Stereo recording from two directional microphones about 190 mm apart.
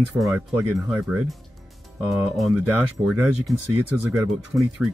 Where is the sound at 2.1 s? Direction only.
Centre (ahead or behind).